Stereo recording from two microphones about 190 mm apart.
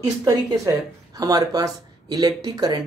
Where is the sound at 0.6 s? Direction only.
20° right (ahead or behind).